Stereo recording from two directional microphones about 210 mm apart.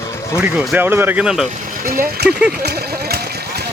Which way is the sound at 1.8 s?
40° right (ahead or behind).